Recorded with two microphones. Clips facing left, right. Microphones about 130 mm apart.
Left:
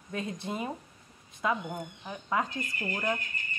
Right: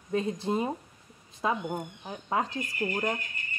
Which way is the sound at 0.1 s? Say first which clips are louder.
Right 7 dB; 30° right (ahead or behind).